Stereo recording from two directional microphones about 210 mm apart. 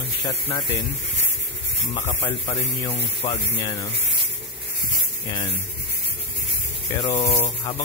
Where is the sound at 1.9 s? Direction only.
35° left (ahead or behind).